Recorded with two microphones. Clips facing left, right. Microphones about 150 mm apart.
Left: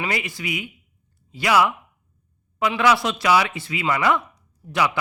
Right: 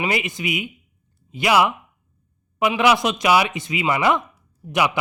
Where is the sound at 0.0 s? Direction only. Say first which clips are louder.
Right 4 dB; 20° right (ahead or behind).